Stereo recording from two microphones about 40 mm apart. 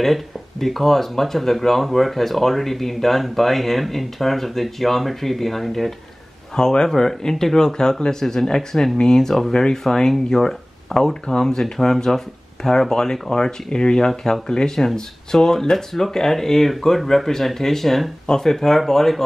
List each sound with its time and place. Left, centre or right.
0.0 s speech: centre
6.5 s speech: centre